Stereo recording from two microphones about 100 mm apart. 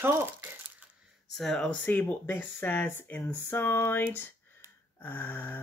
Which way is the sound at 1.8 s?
20° left (ahead or behind).